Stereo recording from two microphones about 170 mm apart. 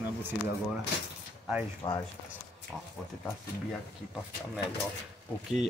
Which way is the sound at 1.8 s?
30° left (ahead or behind).